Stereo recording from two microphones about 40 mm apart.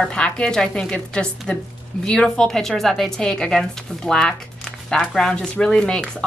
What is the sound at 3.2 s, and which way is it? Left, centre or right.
A woman's voice, centre.